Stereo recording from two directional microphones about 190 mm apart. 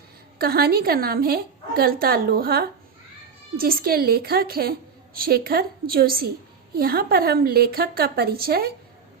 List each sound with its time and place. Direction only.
0.3 s a woman's voice: 55° right (ahead or behind)